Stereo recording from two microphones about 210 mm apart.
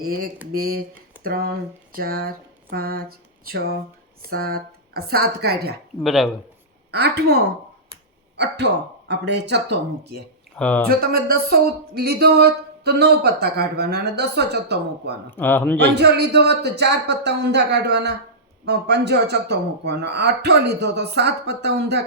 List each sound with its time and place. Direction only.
0.0 s a man's voice: 45° right (ahead or behind)
6.0 s speech: centre (ahead or behind)
7.2 s a man's voice: 50° right (ahead or behind)
10.6 s a man's voice: 5° left (ahead or behind)
10.8 s a man's voice: 45° right (ahead or behind)
15.3 s a man's voice: 10° left (ahead or behind)
16.0 s a man's voice: 50° right (ahead or behind)